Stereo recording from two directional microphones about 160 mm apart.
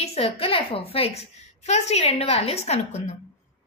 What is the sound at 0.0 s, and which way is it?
A woman's voice, 35° left (ahead or behind).